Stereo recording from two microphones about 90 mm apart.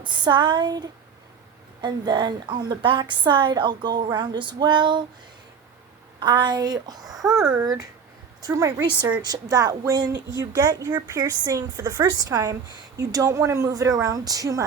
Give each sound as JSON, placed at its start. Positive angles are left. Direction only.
{"t": 0.0, "sound": "a woman's voice", "side_deg": -60}
{"t": 6.1, "sound": "a woman's voice", "side_deg": -55}
{"t": 7.2, "sound": "speech", "side_deg": -5}
{"t": 7.5, "sound": "a woman's voice", "side_deg": -45}